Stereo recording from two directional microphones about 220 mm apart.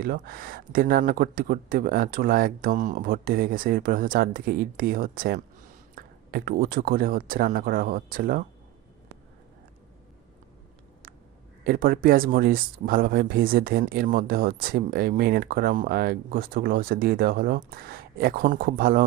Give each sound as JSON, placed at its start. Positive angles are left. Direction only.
{"t": 0.0, "sound": "speech", "side_deg": -40}
{"t": 11.6, "sound": "speech", "side_deg": -40}